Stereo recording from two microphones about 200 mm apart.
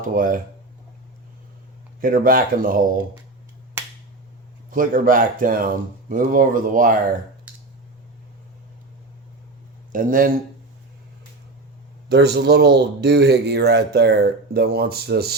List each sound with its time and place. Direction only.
0.0 s speech: 40° right (ahead or behind)
2.0 s speech: 45° right (ahead or behind)
4.7 s speech: 45° right (ahead or behind)
9.9 s speech: 45° right (ahead or behind)
12.0 s speech: 55° right (ahead or behind)